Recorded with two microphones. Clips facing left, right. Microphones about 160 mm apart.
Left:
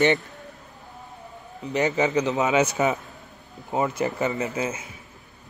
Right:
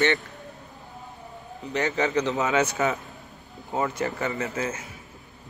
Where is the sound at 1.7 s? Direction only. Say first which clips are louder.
Left 2 dB; 15° left (ahead or behind).